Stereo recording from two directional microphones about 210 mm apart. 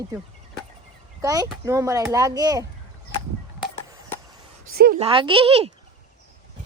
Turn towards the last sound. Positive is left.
turn(degrees=-30)  # may be behind; listen again after turning